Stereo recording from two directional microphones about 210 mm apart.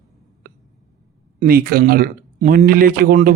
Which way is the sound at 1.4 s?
45° right (ahead or behind).